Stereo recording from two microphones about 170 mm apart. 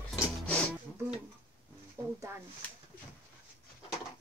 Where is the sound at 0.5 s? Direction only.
5° left (ahead or behind).